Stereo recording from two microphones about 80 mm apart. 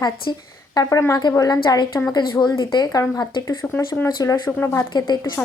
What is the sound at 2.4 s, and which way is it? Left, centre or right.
Speech, left.